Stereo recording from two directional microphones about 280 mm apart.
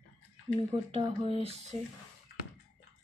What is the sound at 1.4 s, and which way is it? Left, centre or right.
Speech, right.